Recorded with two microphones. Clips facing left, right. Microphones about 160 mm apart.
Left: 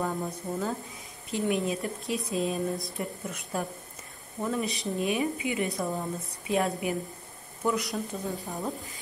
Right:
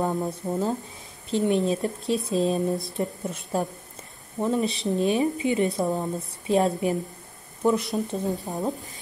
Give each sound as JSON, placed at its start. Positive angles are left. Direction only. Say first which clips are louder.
{"t": 0.0, "sound": "speech", "louder": "right 5 dB", "side_deg": -25}